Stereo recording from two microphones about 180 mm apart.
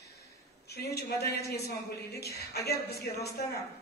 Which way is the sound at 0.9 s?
65° left (ahead or behind).